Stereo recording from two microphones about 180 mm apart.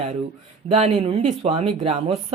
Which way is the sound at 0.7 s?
35° right (ahead or behind).